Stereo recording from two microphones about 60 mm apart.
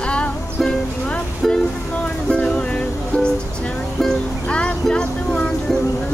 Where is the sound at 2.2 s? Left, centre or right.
Centre.